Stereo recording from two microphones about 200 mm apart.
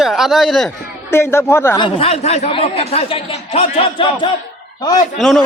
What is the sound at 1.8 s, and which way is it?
A man's voice, 30° left (ahead or behind).